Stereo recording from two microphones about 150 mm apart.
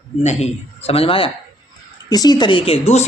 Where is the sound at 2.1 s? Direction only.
25° left (ahead or behind).